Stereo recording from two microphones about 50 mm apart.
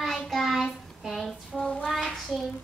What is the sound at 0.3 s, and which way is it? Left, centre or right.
Child singing, centre.